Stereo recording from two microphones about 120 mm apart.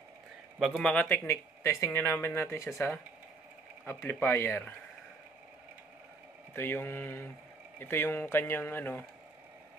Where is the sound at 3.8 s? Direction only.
20° left (ahead or behind).